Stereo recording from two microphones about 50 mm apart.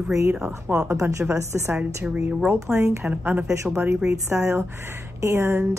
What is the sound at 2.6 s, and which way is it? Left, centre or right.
Speech, right.